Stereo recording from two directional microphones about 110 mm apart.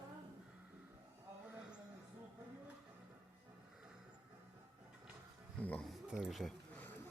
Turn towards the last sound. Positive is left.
turn(degrees=0)  # may be behind; listen again after turning